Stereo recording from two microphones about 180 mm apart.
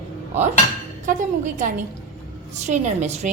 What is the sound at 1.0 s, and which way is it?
A woman's voice, 45° right (ahead or behind).